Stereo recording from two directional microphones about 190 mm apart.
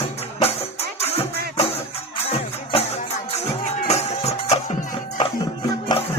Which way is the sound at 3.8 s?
35° left (ahead or behind).